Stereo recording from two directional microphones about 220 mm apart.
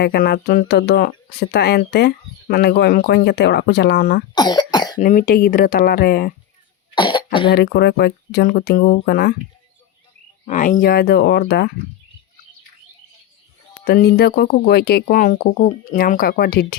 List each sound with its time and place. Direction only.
0.0 s speech: 45° left (ahead or behind)
4.4 s cough: 20° left (ahead or behind)
4.9 s speech: 35° left (ahead or behind)
6.9 s cough: 20° left (ahead or behind)
7.5 s speech: 50° left (ahead or behind)
10.4 s speech: 35° left (ahead or behind)
13.8 s speech: 45° left (ahead or behind)